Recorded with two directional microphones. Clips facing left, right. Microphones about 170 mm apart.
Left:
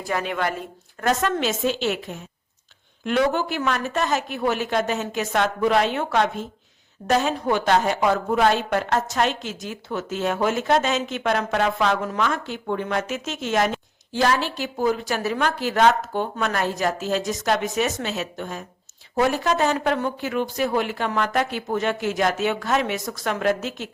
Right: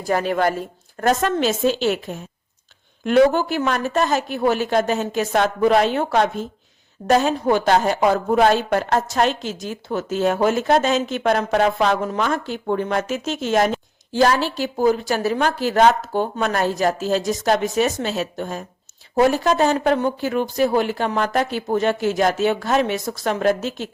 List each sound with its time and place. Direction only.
0.1 s a woman's voice: 40° right (ahead or behind)